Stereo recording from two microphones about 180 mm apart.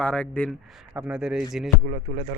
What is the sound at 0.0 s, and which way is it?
Speech, 5° left (ahead or behind).